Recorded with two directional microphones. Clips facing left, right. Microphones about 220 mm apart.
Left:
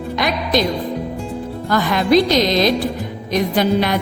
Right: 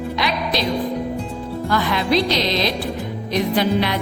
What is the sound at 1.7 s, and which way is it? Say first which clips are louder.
Music: left 5 dB; 45° left (ahead or behind).